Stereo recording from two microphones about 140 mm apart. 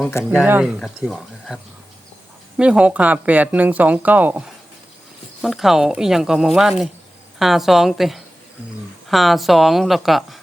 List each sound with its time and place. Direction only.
0.1 s speech: 20° left (ahead or behind)
0.6 s speech: centre (ahead or behind)
2.6 s speech: 10° right (ahead or behind)